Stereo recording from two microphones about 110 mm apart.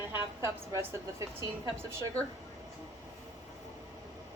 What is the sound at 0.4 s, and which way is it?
Speech, 25° right (ahead or behind).